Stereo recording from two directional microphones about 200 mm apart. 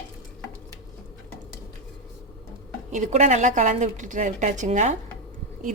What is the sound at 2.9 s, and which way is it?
A woman's voice, 35° right (ahead or behind).